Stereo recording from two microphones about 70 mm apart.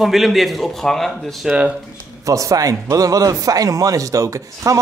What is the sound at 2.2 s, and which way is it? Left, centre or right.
Speech, right.